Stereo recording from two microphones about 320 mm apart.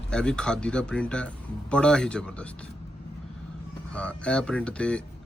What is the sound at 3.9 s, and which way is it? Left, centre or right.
A man's voice, centre.